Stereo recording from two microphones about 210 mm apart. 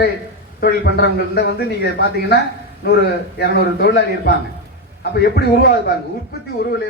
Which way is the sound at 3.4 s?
50° left (ahead or behind).